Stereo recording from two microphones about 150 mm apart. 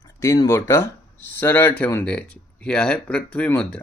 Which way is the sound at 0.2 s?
20° left (ahead or behind).